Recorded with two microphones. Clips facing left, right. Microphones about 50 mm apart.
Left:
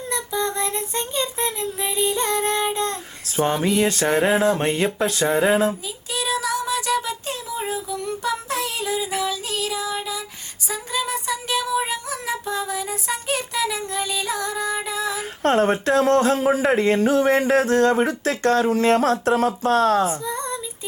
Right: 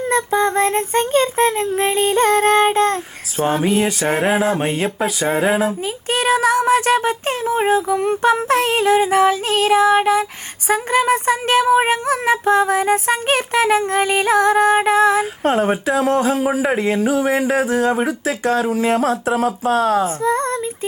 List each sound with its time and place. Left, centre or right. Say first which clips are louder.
0.0 s female singing: right 8 dB; right
0.6 s music: right 9 dB; right
3.4 s speech: right 3 dB; centre
5.2 s speech: right 1 dB; right
5.5 s speech: right 1 dB; centre
6.1 s female singing: right 8 dB; right
15.4 s speech: left 1 dB; centre
20.2 s female singing: right 9 dB; right